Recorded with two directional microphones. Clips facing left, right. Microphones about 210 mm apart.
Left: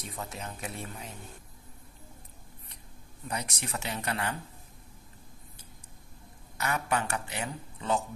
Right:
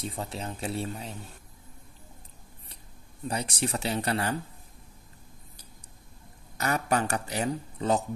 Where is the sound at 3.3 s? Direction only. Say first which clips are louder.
Right 5 dB; 30° right (ahead or behind).